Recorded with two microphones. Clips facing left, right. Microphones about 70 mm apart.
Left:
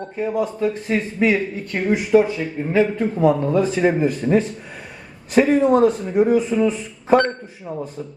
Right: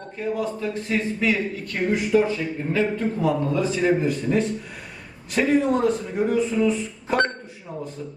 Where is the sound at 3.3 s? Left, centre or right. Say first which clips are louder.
Left 6 dB; left; by 6.6 s centre.